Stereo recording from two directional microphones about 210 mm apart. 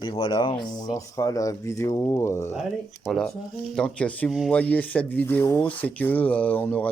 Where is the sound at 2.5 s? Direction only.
Centre (ahead or behind).